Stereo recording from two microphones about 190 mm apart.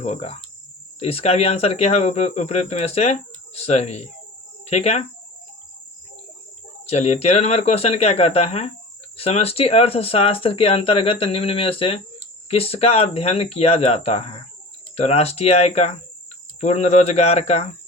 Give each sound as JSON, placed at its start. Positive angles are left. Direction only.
{"t": 0.0, "sound": "speech", "side_deg": 35}
{"t": 6.8, "sound": "speech", "side_deg": 35}